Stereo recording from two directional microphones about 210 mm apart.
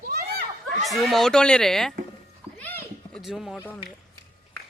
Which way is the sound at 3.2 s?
Centre (ahead or behind).